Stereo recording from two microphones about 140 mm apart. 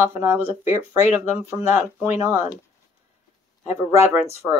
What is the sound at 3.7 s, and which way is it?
Speech, 20° right (ahead or behind).